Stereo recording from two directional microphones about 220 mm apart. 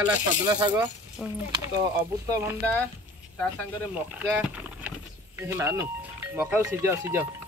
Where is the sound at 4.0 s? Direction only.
5° right (ahead or behind).